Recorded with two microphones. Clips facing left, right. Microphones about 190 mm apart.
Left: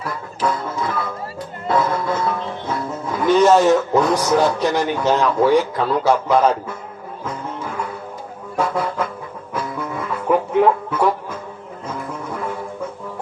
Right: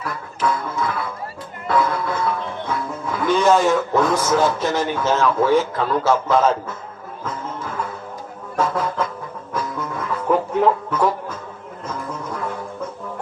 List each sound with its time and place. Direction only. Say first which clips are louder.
0.0 s music: left 1 dB; 25° left (ahead or behind)
3.7 s speech: left 2 dB; 20° left (ahead or behind)
8.5 s vehicle: even; 10° left (ahead or behind)
10.2 s music: left 2 dB; 10° left (ahead or behind)